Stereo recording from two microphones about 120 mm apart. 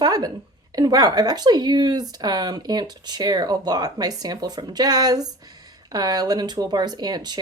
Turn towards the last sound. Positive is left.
turn(degrees=-35)  # may be behind; listen again after turning